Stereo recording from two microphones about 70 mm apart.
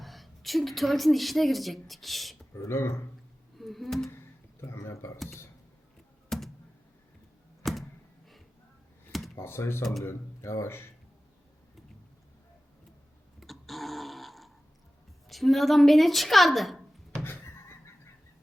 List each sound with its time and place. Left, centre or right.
0.0 s a woman's voice: centre
2.6 s speech: left
3.6 s a sound: centre
4.7 s speech: left
6.2 s a sound: centre
7.6 s a sound: centre
9.4 s speech: left
13.4 s burping: centre
15.3 s speech: centre